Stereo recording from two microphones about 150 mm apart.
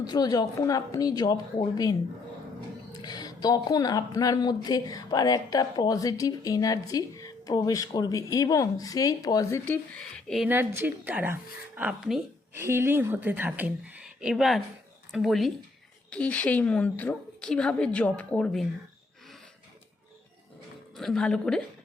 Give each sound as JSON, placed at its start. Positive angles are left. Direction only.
{"t": 0.0, "sound": "speech", "side_deg": 25}
{"t": 9.6, "sound": "speech", "side_deg": 5}
{"t": 10.4, "sound": "speech", "side_deg": -15}
{"t": 12.5, "sound": "a woman's voice", "side_deg": -15}
{"t": 20.9, "sound": "speech", "side_deg": 5}